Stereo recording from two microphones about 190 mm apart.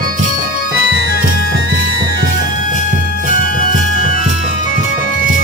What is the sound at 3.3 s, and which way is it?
Music, 45° left (ahead or behind).